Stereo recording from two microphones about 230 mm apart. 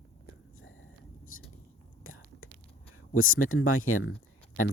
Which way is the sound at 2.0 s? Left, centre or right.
Left.